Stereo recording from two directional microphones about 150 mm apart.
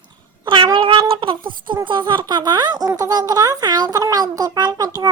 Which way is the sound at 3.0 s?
25° right (ahead or behind).